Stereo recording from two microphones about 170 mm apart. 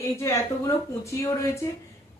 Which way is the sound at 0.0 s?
20° left (ahead or behind).